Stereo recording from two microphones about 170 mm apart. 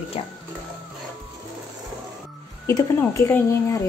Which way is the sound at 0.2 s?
35° left (ahead or behind).